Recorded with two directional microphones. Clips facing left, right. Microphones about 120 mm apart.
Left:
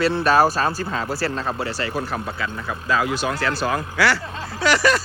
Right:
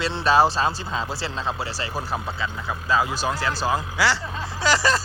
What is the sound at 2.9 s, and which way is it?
Speech, 25° right (ahead or behind).